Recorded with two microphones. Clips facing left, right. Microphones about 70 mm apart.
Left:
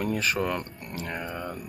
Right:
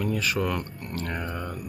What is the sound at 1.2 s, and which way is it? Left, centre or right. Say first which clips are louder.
Speech: right 1 dB; centre.